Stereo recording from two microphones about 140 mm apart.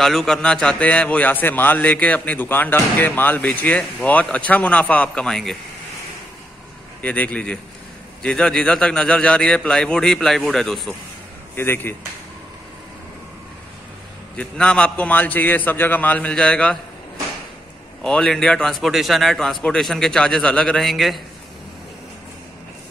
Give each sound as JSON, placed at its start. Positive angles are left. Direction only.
{"t": 0.0, "sound": "a man's voice", "side_deg": 5}
{"t": 7.0, "sound": "a man's voice", "side_deg": 10}
{"t": 11.5, "sound": "a man's voice", "side_deg": 15}
{"t": 14.3, "sound": "a man's voice", "side_deg": 10}
{"t": 18.0, "sound": "a man's voice", "side_deg": 5}